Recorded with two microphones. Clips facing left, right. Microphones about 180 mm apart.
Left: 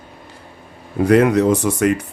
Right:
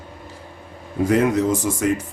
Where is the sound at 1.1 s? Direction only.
65° left (ahead or behind).